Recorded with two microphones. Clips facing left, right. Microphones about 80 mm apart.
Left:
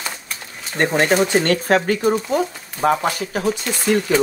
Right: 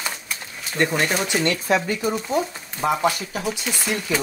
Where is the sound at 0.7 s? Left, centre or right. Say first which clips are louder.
Left 5 dB; left.